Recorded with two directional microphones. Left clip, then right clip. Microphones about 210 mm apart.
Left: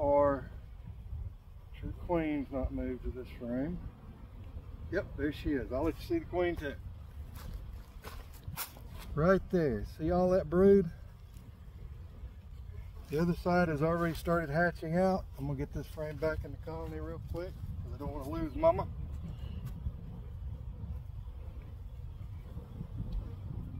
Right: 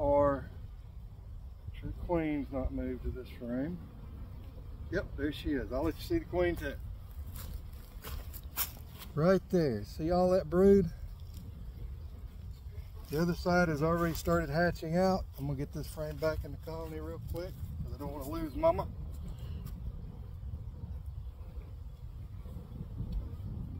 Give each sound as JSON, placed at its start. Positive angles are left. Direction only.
{"t": 0.0, "sound": "a sound", "side_deg": -5}
{"t": 1.8, "sound": "speech", "side_deg": -5}
{"t": 4.9, "sound": "speech", "side_deg": -10}
{"t": 8.5, "sound": "a sound", "side_deg": -5}
{"t": 9.1, "sound": "speech", "side_deg": -20}
{"t": 13.1, "sound": "speech", "side_deg": -15}
{"t": 17.9, "sound": "speech", "side_deg": -25}